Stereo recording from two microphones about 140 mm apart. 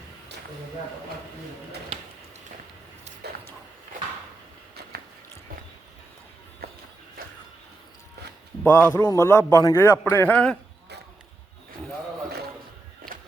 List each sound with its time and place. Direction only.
8.6 s a man's voice: 15° left (ahead or behind)